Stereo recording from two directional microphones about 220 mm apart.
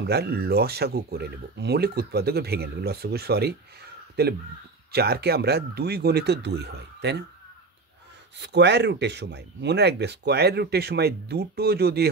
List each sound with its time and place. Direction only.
0.0 s speech: 45° right (ahead or behind)
8.4 s speech: 50° right (ahead or behind)